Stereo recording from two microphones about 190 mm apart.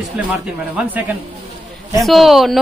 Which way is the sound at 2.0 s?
Centre (ahead or behind).